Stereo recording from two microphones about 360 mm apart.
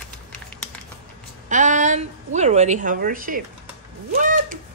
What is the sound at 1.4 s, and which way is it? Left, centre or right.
Speech, centre.